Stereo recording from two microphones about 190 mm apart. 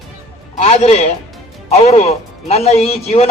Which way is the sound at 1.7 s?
35° left (ahead or behind).